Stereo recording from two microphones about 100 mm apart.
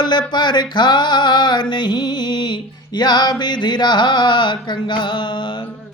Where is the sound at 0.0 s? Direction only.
50° left (ahead or behind).